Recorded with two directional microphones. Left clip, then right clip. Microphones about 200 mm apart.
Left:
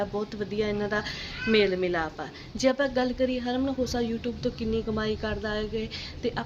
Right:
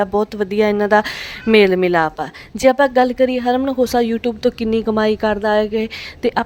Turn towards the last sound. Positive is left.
turn(degrees=-50)  # may be behind; listen again after turning